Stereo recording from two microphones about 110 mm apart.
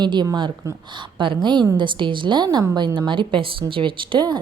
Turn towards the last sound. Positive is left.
turn(degrees=-40)  # may be behind; listen again after turning